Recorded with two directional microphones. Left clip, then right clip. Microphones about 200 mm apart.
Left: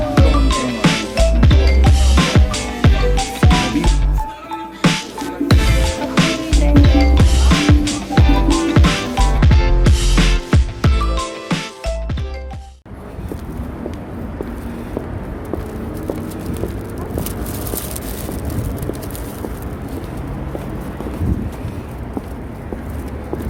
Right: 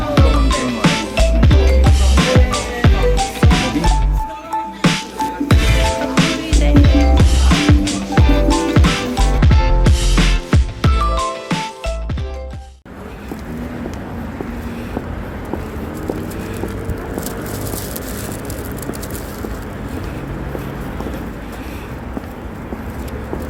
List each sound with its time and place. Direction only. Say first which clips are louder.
0.2 s music: even; centre (ahead or behind)